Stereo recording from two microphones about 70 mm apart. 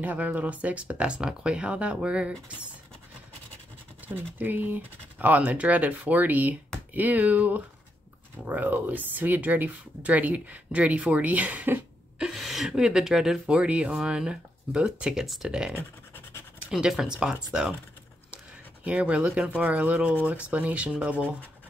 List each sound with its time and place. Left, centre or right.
0.0 s speech: right
4.1 s speech: right
12.4 s speech: centre
16.7 s speech: centre
18.9 s speech: centre